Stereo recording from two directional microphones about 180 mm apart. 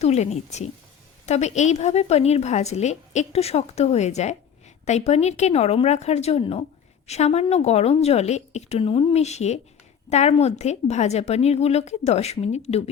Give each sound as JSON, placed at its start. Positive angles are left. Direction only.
{"t": 0.0, "sound": "a woman's voice", "side_deg": 40}